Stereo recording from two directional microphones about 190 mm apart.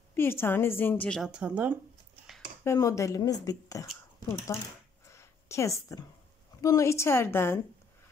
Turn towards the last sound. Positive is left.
turn(degrees=10)  # may be behind; listen again after turning